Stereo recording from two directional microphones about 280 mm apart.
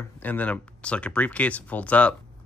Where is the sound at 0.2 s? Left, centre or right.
Centre.